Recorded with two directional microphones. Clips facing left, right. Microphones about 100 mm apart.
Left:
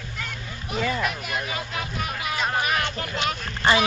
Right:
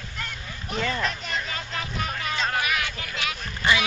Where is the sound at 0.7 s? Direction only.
5° left (ahead or behind).